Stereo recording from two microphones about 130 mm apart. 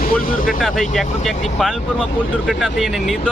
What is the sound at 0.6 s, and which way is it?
Speech, centre (ahead or behind).